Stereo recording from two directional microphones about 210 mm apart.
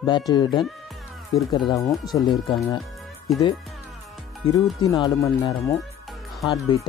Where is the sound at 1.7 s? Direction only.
15° left (ahead or behind).